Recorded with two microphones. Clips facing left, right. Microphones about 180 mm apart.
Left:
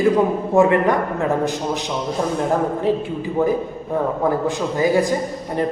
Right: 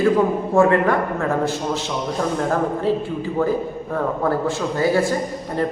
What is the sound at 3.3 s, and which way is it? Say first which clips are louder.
A man's voice: left 2 dB; 15° left (ahead or behind).